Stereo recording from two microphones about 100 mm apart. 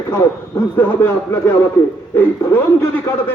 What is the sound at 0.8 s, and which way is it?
A man's voice, 20° left (ahead or behind).